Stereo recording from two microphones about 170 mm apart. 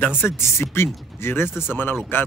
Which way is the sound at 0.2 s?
15° left (ahead or behind).